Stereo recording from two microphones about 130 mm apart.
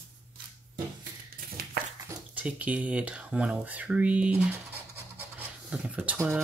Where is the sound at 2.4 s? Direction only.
10° right (ahead or behind).